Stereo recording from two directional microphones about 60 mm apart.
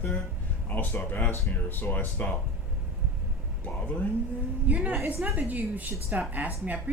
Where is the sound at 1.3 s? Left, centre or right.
Left.